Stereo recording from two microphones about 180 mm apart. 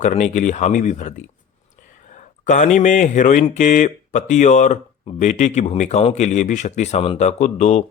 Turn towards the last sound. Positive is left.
turn(degrees=40)  # may be behind; listen again after turning